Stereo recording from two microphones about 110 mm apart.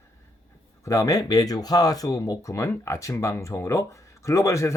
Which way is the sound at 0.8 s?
30° left (ahead or behind).